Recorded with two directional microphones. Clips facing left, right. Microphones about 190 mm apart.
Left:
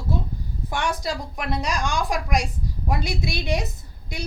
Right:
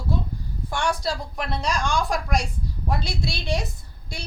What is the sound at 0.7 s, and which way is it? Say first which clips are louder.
A woman's voice: right 1 dB; 15° left (ahead or behind).